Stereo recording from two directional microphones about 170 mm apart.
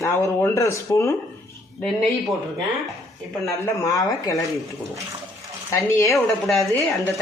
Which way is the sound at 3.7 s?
20° left (ahead or behind).